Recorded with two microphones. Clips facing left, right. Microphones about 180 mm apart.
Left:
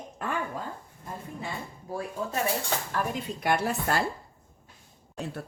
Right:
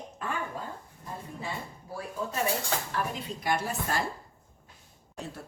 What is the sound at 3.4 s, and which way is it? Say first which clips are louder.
Speech: left 4 dB; 65° left (ahead or behind).